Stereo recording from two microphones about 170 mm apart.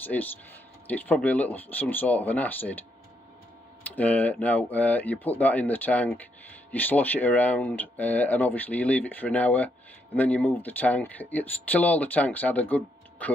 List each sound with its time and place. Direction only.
0.0 s speech: 10° left (ahead or behind)
3.9 s speech: 10° left (ahead or behind)